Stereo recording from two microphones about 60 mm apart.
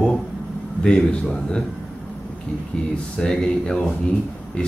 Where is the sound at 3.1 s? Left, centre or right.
Centre.